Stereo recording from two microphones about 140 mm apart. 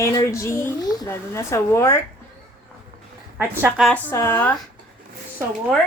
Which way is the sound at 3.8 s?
10° left (ahead or behind).